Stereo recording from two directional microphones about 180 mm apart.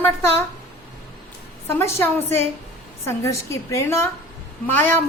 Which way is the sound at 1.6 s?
15° left (ahead or behind).